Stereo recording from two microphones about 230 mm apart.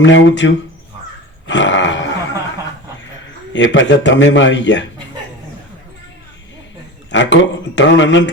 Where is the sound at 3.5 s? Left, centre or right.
Left.